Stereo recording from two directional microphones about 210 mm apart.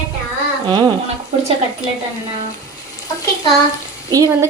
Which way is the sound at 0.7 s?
20° right (ahead or behind).